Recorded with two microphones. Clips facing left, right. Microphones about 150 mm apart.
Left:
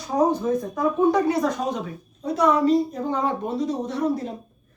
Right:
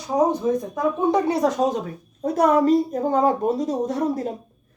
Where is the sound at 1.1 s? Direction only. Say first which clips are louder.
Right 3 dB; 25° right (ahead or behind).